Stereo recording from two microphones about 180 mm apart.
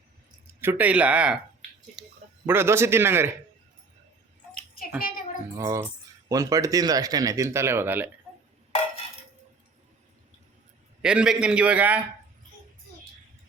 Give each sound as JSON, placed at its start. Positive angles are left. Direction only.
{"t": 0.6, "sound": "a man's voice", "side_deg": -10}
{"t": 2.0, "sound": "a sound", "side_deg": 0}
{"t": 2.5, "sound": "a man's voice", "side_deg": -15}
{"t": 5.5, "sound": "a man's voice", "side_deg": -15}
{"t": 11.0, "sound": "a man's voice", "side_deg": -5}